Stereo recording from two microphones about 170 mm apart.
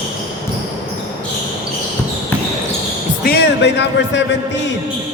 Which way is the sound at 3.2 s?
70° left (ahead or behind).